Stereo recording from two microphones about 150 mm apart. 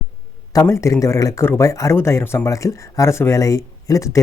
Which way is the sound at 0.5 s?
20° left (ahead or behind).